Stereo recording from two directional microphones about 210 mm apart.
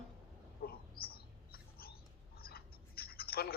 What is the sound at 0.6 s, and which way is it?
Bird, 45° left (ahead or behind).